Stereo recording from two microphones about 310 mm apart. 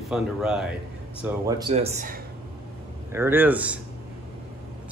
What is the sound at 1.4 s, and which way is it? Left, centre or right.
Speech, centre.